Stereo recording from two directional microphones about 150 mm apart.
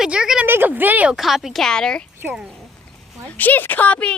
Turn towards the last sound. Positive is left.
turn(degrees=10)  # may be behind; listen again after turning